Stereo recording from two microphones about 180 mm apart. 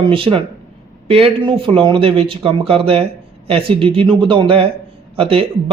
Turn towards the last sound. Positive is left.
turn(degrees=-30)  # may be behind; listen again after turning